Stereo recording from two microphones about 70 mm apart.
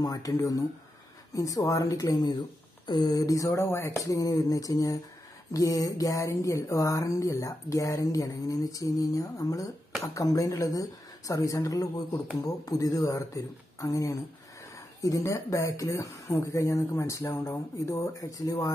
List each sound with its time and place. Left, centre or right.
0.0 s speech: left
2.9 s speech: left
3.4 s speech: left
3.9 s speech: left